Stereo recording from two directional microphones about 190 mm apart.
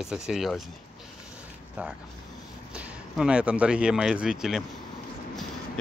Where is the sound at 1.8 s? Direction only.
5° right (ahead or behind).